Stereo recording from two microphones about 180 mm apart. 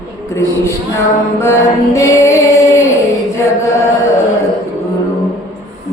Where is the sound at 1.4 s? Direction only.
15° left (ahead or behind).